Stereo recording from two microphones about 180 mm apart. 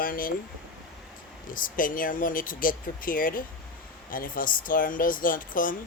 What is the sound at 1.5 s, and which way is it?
Speech, 50° left (ahead or behind).